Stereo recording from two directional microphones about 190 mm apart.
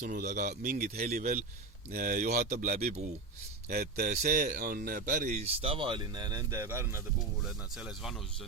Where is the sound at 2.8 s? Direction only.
35° right (ahead or behind).